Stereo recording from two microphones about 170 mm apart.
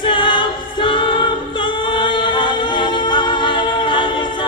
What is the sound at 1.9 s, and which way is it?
A capella, 30° left (ahead or behind).